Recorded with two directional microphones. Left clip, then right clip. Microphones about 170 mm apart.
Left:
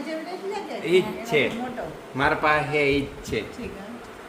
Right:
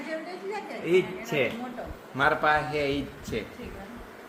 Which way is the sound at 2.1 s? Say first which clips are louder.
Left 2 dB; 35° right (ahead or behind).